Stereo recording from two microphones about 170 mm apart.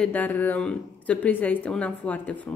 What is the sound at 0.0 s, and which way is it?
A woman's voice, 10° left (ahead or behind).